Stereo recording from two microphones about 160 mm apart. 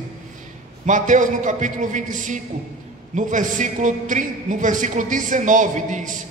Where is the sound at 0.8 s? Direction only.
50° right (ahead or behind).